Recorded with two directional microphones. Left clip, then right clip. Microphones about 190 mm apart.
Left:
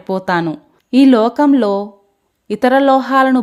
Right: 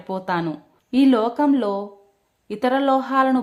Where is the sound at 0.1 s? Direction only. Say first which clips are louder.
Left 8 dB; 40° left (ahead or behind).